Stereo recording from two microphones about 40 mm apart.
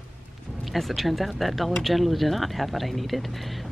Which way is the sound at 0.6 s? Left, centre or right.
Centre.